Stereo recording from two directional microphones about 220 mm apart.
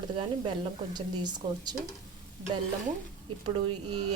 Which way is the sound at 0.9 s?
20° right (ahead or behind).